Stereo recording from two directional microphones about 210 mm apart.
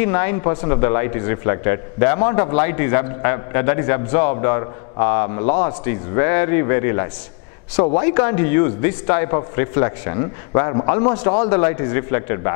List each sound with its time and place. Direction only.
0.0 s a man's voice: 15° left (ahead or behind)